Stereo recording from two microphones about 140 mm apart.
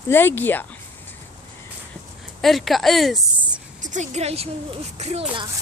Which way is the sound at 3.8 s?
60° right (ahead or behind).